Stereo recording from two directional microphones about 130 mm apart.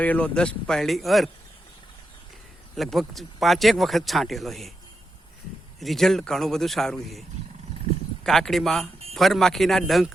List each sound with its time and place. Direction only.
0.0 s speech: 10° left (ahead or behind)
2.7 s speech: centre (ahead or behind)
5.8 s speech: centre (ahead or behind)